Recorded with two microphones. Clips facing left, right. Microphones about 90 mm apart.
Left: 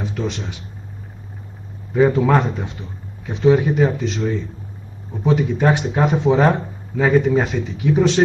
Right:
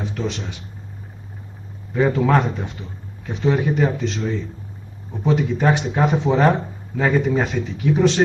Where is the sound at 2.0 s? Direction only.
5° left (ahead or behind).